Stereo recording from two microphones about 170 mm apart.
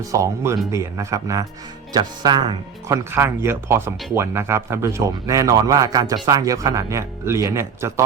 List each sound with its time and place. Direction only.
0.1 s speech: 20° right (ahead or behind)